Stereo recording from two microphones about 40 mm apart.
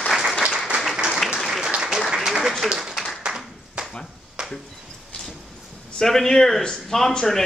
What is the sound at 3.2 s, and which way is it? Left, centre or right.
Clapping, right.